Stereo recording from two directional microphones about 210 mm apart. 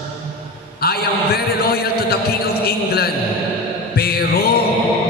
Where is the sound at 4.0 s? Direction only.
50° left (ahead or behind).